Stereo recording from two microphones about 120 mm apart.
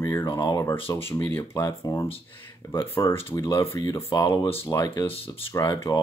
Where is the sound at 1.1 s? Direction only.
20° left (ahead or behind).